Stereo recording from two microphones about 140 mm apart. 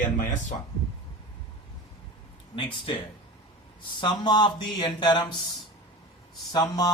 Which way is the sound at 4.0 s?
35° left (ahead or behind).